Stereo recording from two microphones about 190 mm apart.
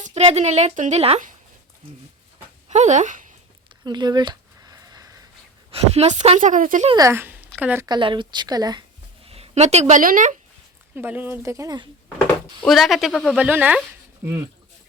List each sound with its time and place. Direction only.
0.0 s a woman's voice: 35° right (ahead or behind)
2.6 s speech: 40° right (ahead or behind)
3.8 s a sound: 25° right (ahead or behind)
5.7 s a woman's voice: 35° right (ahead or behind)
6.9 s speech: 15° right (ahead or behind)
7.9 s a woman's voice: 25° right (ahead or behind)
9.2 s speech: 30° right (ahead or behind)
10.9 s speech: 10° right (ahead or behind)
12.6 s speech: centre (ahead or behind)